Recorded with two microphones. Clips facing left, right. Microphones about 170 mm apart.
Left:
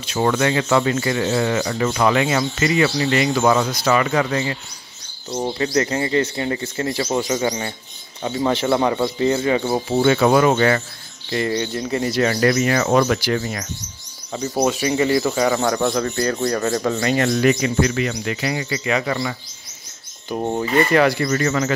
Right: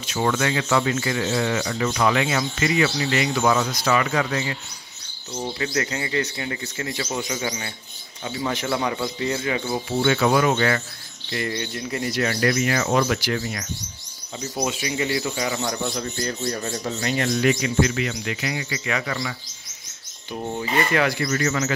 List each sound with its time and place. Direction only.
0.1 s speech: 35° left (ahead or behind)
12.7 s speech: 50° left (ahead or behind)
13.2 s speech: 35° left (ahead or behind)
14.3 s speech: 55° left (ahead or behind)
15.7 s speech: 85° left
17.4 s speech: 45° left (ahead or behind)
20.2 s speech: 50° left (ahead or behind)